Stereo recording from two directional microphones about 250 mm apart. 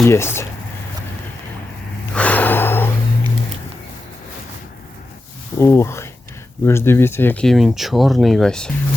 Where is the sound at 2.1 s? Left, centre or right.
Centre.